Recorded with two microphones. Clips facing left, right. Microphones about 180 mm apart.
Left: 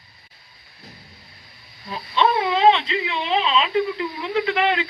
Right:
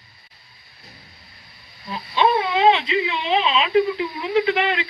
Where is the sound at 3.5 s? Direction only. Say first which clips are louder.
Right 2 dB; 5° right (ahead or behind).